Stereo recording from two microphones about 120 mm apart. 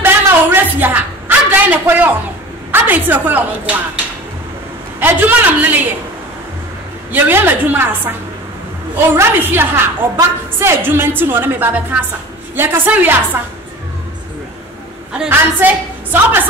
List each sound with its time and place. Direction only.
0.0 s a sound: 15° right (ahead or behind)
2.7 s a woman's voice: 15° right (ahead or behind)
5.0 s a woman's voice: 15° right (ahead or behind)
7.1 s a woman's voice: 15° right (ahead or behind)
9.1 s a woman's voice: 20° right (ahead or behind)
15.1 s a woman's voice: 15° right (ahead or behind)